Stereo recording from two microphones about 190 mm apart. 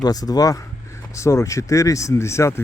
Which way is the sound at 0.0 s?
20° left (ahead or behind).